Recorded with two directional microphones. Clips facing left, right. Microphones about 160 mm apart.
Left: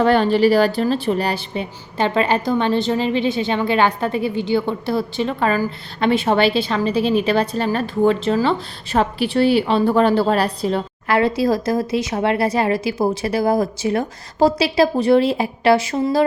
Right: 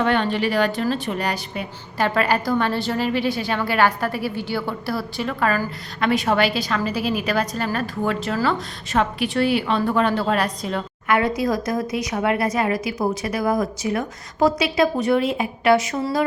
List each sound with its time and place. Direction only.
0.0 s a woman's voice: 35° left (ahead or behind)